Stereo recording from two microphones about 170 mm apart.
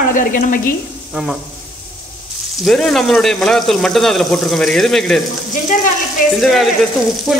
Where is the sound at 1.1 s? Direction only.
5° right (ahead or behind).